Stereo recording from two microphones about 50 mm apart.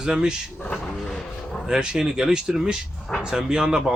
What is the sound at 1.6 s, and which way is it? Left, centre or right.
Speech, centre.